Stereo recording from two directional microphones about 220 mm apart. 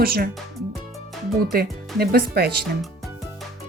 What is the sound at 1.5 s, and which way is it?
Speech, 40° right (ahead or behind).